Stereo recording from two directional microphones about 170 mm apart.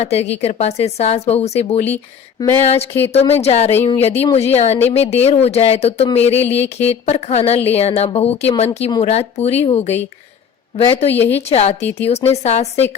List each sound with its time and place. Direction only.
0.0 s speech: 35° left (ahead or behind)
11.2 s a woman's voice: 10° left (ahead or behind)
11.4 s speech: 35° left (ahead or behind)